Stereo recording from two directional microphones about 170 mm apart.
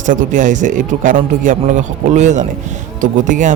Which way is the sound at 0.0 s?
50° right (ahead or behind).